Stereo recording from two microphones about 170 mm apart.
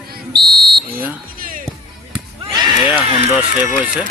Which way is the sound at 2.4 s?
25° right (ahead or behind).